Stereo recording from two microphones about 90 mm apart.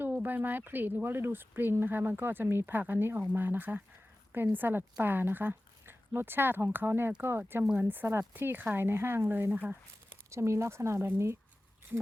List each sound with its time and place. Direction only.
0.0 s a woman's voice: 20° right (ahead or behind)